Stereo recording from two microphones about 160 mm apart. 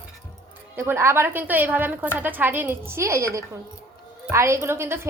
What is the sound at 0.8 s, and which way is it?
A woman's voice, 15° right (ahead or behind).